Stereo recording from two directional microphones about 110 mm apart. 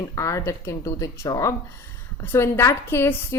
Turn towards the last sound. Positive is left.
turn(degrees=20)  # may be behind; listen again after turning